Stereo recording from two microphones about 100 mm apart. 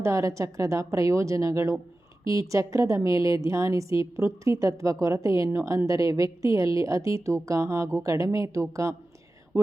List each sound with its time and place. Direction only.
0.0 s a woman's voice: 30° right (ahead or behind)